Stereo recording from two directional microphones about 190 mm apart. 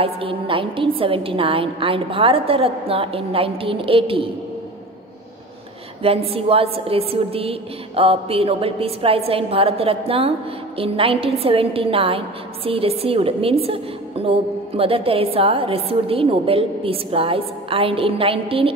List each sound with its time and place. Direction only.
0.0 s a woman's voice: 30° right (ahead or behind)
6.0 s a woman's voice: 30° right (ahead or behind)